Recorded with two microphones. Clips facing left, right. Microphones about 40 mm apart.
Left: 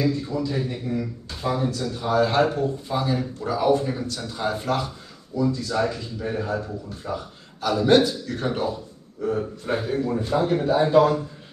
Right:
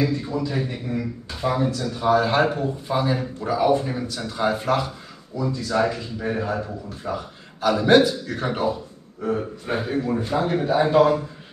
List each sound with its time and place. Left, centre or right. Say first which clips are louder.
0.0 s speech: right 1 dB; right
1.7 s a man's voice: right 4 dB; centre